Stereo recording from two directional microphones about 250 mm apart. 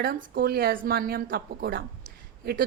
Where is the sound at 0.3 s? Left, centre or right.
Right.